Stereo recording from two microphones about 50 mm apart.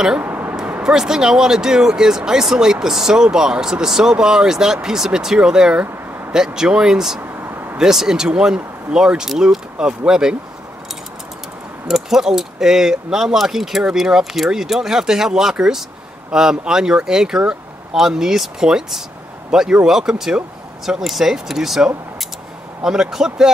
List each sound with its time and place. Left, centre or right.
0.2 s a sound: right
0.8 s speech: centre
7.2 s vehicle: right
7.7 s speech: centre
11.9 s speech: centre
22.8 s speech: centre